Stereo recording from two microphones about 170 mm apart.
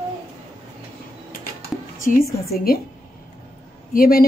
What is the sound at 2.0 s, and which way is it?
Speech, 55° left (ahead or behind).